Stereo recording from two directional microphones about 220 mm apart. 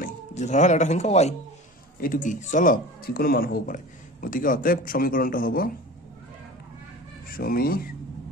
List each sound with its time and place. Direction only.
0.0 s speech: 30° left (ahead or behind)
7.2 s speech: 40° left (ahead or behind)